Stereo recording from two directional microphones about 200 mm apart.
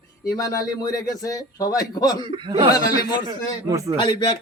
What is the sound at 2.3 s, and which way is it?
A man's voice, 25° right (ahead or behind).